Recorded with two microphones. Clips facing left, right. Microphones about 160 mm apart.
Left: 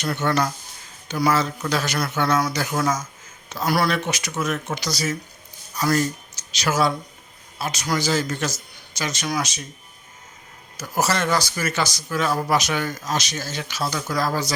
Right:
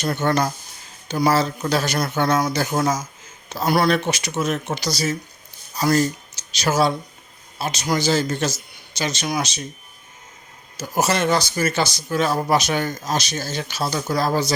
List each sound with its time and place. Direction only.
0.3 s speech: 35° right (ahead or behind)
2.0 s speech: 45° right (ahead or behind)
2.4 s speech: 30° right (ahead or behind)
10.8 s speech: 20° right (ahead or behind)